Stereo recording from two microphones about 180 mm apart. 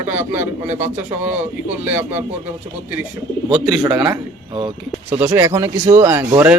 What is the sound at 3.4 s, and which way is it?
Speech, 25° right (ahead or behind).